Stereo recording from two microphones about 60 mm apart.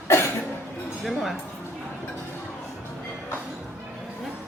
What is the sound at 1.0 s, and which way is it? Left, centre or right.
Speech, centre.